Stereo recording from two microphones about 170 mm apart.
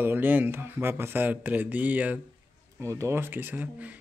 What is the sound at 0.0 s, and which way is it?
Speech, 10° right (ahead or behind).